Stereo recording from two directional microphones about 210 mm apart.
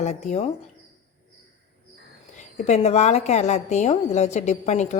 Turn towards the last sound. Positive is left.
turn(degrees=35)  # may be behind; listen again after turning